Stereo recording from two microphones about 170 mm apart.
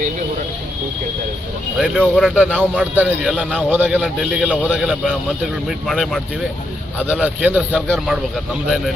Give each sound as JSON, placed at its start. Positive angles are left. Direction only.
{"t": 1.8, "sound": "a man's voice", "side_deg": 0}